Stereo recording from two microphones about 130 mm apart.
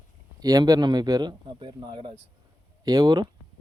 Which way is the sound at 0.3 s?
30° right (ahead or behind).